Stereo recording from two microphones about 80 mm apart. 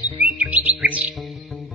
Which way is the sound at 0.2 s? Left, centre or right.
Centre.